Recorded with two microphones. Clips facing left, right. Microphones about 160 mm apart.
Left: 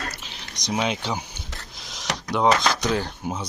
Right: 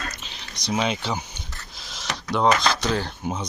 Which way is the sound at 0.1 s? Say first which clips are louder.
Even; 10° left (ahead or behind).